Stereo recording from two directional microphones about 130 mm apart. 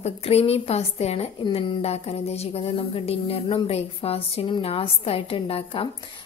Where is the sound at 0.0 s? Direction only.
50° left (ahead or behind).